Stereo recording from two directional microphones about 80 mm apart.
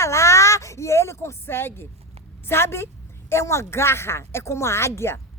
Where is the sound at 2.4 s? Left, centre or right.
Left.